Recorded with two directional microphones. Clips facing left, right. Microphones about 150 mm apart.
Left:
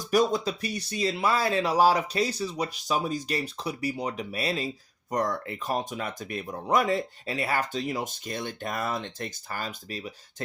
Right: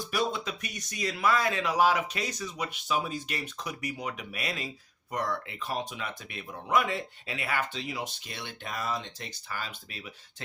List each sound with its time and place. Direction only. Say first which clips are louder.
0.0 s speech: left 7 dB; 40° left (ahead or behind)
5.1 s speech: left 4 dB; 40° left (ahead or behind)